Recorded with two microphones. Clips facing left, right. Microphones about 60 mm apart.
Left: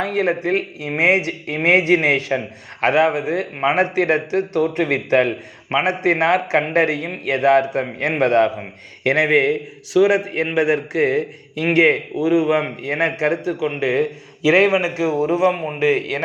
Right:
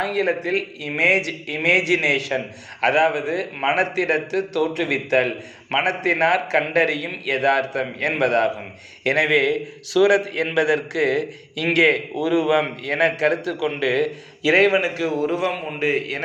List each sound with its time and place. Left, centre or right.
0.0 s a man's voice: left